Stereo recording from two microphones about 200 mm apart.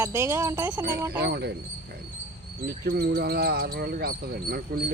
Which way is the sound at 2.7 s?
50° right (ahead or behind).